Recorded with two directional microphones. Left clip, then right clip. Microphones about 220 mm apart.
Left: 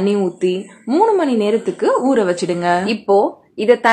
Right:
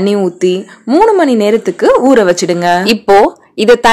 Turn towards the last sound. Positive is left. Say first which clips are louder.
# right 6 dB
turn(degrees=-45)  # may be behind; listen again after turning